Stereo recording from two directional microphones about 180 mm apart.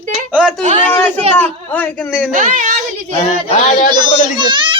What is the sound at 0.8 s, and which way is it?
Speech, 10° left (ahead or behind).